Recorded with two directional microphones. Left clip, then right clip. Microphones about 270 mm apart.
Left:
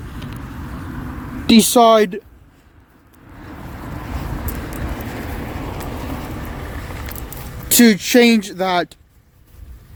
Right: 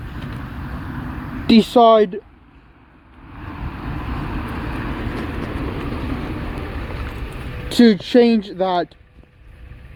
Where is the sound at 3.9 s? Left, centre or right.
Right.